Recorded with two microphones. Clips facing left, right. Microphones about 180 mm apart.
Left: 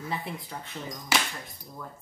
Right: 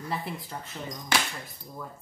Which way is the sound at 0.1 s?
Centre (ahead or behind).